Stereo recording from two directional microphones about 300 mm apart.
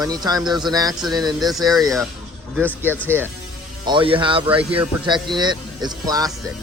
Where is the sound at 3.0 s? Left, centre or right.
Centre.